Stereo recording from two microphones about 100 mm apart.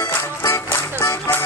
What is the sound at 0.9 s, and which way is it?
Music, 25° left (ahead or behind).